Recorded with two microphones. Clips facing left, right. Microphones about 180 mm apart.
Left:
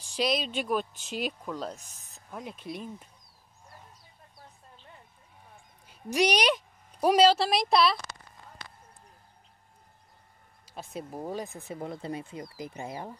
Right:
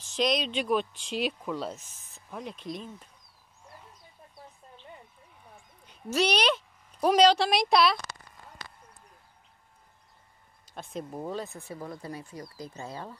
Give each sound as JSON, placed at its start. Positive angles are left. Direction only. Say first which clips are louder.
{"t": 0.1, "sound": "speech", "louder": "right 1 dB", "side_deg": 5}
{"t": 2.3, "sound": "speech", "louder": "right 1 dB", "side_deg": 5}
{"t": 5.9, "sound": "a woman's voice", "louder": "left 1 dB", "side_deg": 15}
{"t": 10.7, "sound": "speech", "louder": "right 1 dB", "side_deg": 5}